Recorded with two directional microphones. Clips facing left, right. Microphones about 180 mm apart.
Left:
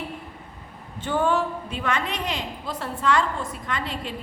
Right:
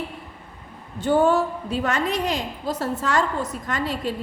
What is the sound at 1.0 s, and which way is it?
A woman's voice, 40° right (ahead or behind).